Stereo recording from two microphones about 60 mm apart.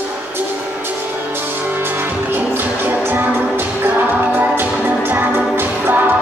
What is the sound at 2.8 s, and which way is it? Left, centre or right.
Music, right.